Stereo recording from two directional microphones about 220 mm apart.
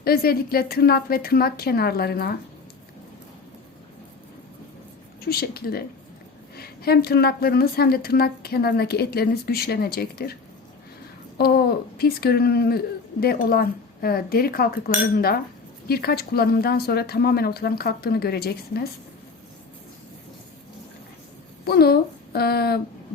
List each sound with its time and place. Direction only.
0.0 s a woman's voice: 45° left (ahead or behind)
5.2 s a woman's voice: 45° left (ahead or behind)
11.3 s a woman's voice: 45° left (ahead or behind)
21.6 s a woman's voice: 45° left (ahead or behind)